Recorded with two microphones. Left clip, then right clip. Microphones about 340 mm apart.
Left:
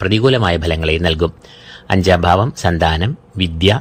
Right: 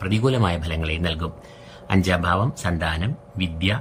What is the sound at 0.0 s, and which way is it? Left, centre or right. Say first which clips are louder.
Speech: left 9 dB; centre.